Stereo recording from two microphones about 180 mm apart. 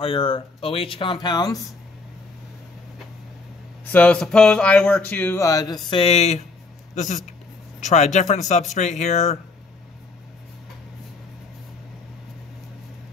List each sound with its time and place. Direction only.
0.0 s speech: 25° left (ahead or behind)
3.9 s speech: 10° left (ahead or behind); by 9.4 s 40° left (ahead or behind)